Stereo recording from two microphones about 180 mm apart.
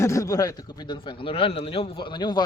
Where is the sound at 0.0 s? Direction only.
15° left (ahead or behind).